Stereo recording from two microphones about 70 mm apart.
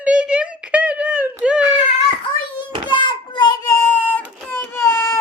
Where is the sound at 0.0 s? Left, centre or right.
Centre.